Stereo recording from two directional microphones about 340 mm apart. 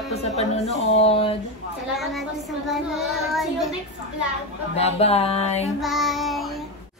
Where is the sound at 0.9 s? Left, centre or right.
Centre.